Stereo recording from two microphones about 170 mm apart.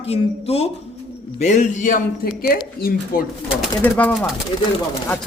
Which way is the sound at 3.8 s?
10° left (ahead or behind).